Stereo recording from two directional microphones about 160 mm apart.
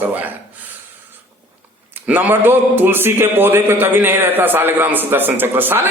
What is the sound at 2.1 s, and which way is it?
A man's voice, 10° right (ahead or behind).